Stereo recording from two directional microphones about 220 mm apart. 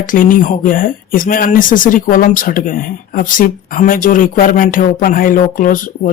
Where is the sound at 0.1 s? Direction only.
40° left (ahead or behind).